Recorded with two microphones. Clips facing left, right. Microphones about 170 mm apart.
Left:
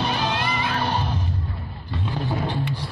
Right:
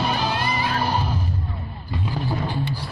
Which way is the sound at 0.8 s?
10° right (ahead or behind).